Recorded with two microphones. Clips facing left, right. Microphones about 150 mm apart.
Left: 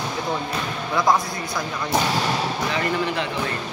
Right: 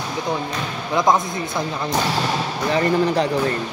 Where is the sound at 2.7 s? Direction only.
35° right (ahead or behind).